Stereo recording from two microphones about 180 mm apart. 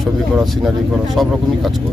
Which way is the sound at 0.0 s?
Centre (ahead or behind).